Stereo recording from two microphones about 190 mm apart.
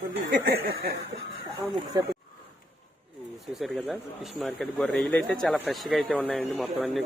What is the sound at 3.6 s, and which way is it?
Speech, centre (ahead or behind).